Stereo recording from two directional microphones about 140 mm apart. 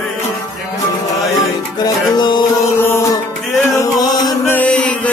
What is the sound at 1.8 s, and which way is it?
Music, 30° left (ahead or behind).